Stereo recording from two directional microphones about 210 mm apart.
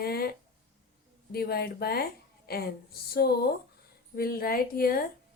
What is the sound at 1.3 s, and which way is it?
A woman's voice, 50° left (ahead or behind).